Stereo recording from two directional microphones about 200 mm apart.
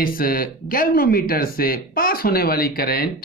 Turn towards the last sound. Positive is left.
turn(degrees=50)  # may be behind; listen again after turning